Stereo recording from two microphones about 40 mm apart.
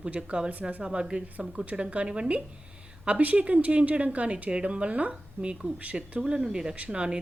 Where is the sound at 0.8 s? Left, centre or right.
Right.